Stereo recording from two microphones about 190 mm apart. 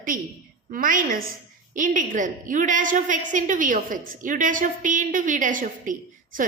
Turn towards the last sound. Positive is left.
turn(degrees=-45)  # may be behind; listen again after turning